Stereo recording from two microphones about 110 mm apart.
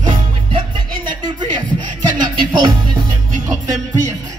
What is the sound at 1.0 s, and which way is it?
Music, 45° right (ahead or behind).